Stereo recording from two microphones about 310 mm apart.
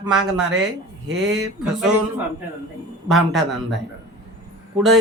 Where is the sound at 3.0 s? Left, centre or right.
Centre.